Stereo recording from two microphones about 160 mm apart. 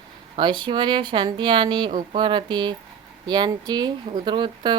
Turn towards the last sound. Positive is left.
turn(degrees=-30)  # may be behind; listen again after turning